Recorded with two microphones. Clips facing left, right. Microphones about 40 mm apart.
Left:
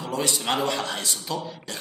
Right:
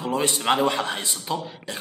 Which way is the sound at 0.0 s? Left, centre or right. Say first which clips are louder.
Right 3 dB; right.